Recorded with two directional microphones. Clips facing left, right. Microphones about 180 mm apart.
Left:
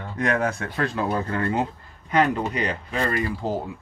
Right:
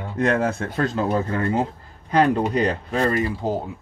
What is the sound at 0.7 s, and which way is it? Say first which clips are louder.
Speech: right 4 dB; 25° right (ahead or behind).